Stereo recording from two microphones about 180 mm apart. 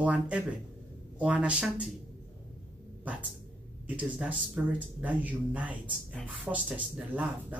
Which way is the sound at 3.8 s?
5° right (ahead or behind).